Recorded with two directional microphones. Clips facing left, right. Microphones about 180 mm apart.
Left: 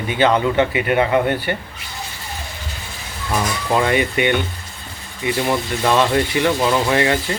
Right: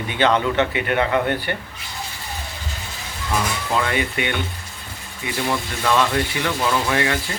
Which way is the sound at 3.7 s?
20° left (ahead or behind).